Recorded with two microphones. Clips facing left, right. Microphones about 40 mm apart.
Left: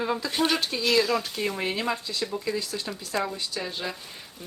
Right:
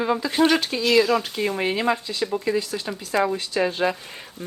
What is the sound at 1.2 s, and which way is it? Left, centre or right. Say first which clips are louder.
Speech: right 5 dB; centre.